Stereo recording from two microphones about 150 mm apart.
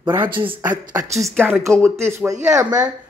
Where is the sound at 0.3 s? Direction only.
35° right (ahead or behind).